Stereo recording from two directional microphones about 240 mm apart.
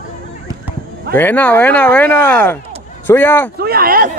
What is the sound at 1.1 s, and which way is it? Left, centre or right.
Speech, centre.